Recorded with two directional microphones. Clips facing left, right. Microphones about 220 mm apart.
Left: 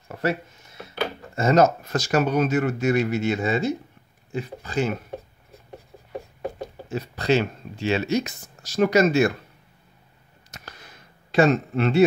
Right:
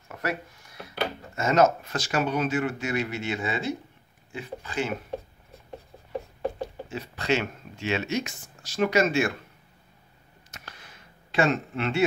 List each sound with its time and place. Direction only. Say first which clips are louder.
0.1 s speech: left 6 dB; 25° left (ahead or behind)
1.3 s speech: left 3 dB; 35° left (ahead or behind)
6.9 s speech: left 6 dB; 40° left (ahead or behind)
10.5 s a sound: left 3 dB; 40° left (ahead or behind)
11.3 s speech: left 6 dB; 40° left (ahead or behind)